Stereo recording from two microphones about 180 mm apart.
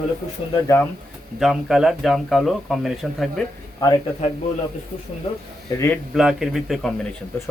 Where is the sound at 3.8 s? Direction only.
20° left (ahead or behind).